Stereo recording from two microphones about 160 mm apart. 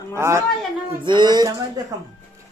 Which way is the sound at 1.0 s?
30° right (ahead or behind).